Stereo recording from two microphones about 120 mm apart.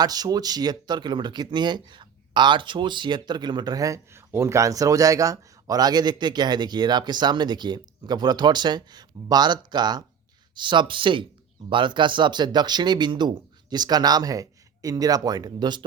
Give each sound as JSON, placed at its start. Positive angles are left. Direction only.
{"t": 0.0, "sound": "speech", "side_deg": -35}